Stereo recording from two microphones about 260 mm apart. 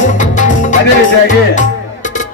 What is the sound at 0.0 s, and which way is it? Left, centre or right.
Music, left.